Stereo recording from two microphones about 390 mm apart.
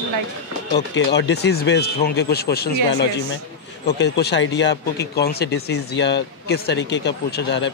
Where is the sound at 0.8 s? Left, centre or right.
Left.